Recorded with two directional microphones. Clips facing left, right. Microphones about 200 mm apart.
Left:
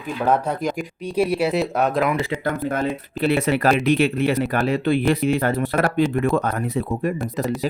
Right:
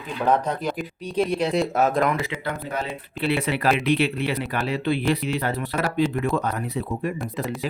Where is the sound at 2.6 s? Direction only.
45° left (ahead or behind).